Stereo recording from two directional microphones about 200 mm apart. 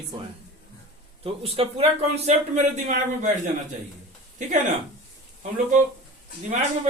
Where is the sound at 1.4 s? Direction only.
30° right (ahead or behind).